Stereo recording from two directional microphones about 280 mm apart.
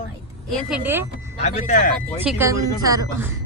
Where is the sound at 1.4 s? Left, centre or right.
Left.